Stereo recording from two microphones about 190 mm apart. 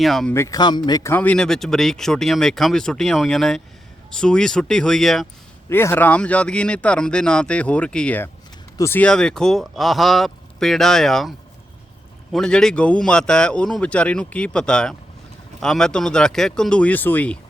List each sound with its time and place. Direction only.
0.0 s speech: centre (ahead or behind)
0.3 s a man's voice: 20° left (ahead or behind)
1.1 s speech: 10° left (ahead or behind)
5.6 s speech: 15° left (ahead or behind)